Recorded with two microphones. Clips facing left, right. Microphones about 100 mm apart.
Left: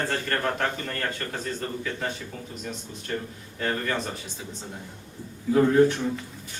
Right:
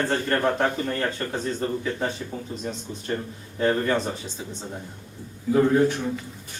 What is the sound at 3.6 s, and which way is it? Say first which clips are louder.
Speech: right 6 dB; 25° right (ahead or behind).